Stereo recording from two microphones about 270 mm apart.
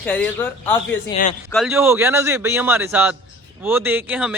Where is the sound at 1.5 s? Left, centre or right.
Centre.